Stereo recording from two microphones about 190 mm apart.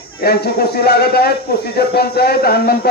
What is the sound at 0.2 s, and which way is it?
A man's voice, 55° left (ahead or behind).